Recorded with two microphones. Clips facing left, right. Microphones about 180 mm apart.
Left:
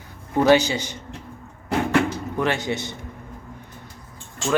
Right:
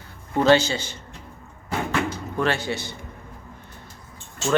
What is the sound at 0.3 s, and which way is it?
Speech, 15° left (ahead or behind).